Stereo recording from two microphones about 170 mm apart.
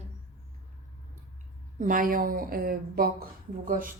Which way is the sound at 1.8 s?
50° right (ahead or behind).